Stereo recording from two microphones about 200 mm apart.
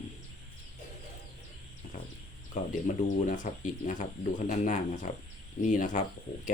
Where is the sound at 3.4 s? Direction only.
40° left (ahead or behind).